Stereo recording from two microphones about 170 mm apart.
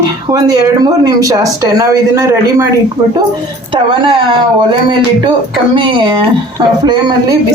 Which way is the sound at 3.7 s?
30° right (ahead or behind).